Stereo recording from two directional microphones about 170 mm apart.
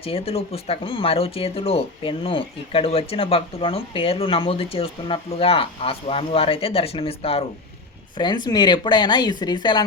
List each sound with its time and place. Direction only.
0.0 s speech: 35° left (ahead or behind)